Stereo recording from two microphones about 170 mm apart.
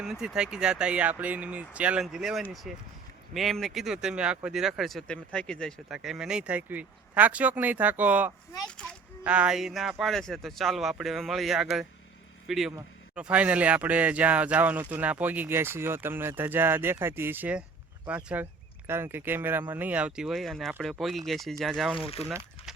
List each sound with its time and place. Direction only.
0.0 s speech: 5° right (ahead or behind)
21.9 s speech: 35° left (ahead or behind)